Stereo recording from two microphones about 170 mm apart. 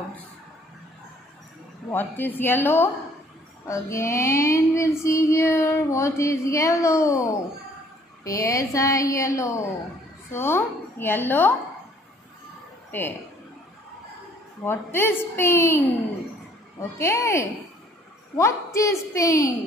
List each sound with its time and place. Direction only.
1.9 s child singing: 10° left (ahead or behind)
8.2 s a woman's voice: 20° left (ahead or behind)
10.3 s child singing: 15° left (ahead or behind)
12.9 s child singing: 10° left (ahead or behind)
14.6 s child singing: 15° left (ahead or behind)
17.0 s child singing: 15° left (ahead or behind)
18.3 s a woman's voice: 15° left (ahead or behind)